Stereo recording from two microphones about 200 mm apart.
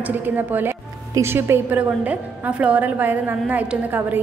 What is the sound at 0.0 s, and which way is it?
A woman's voice, 10° right (ahead or behind).